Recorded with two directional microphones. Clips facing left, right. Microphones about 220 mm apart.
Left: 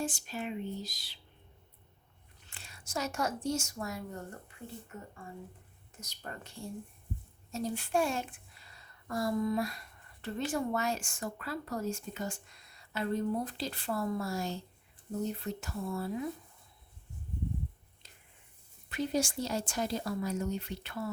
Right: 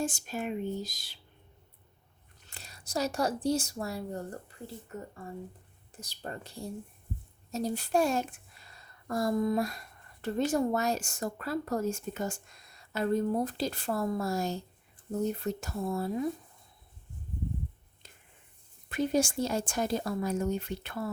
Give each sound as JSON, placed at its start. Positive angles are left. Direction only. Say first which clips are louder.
{"t": 0.0, "sound": "speech", "louder": "right 3 dB", "side_deg": -45}
{"t": 2.5, "sound": "a woman's voice", "louder": "right 4 dB", "side_deg": -40}
{"t": 5.9, "sound": "speech", "louder": "right 5 dB", "side_deg": -30}
{"t": 18.9, "sound": "speech", "louder": "right 4 dB", "side_deg": -50}